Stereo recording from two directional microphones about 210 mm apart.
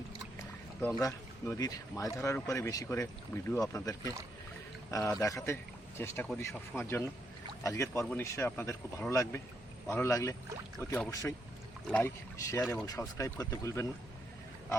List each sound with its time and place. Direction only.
1.0 s speech: 15° left (ahead or behind)